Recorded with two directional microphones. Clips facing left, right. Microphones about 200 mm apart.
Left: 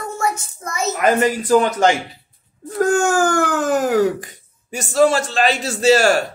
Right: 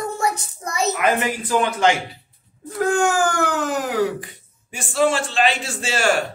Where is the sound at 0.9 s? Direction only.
40° left (ahead or behind).